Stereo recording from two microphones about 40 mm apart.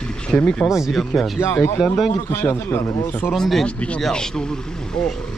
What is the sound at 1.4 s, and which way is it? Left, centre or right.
A man's voice, left.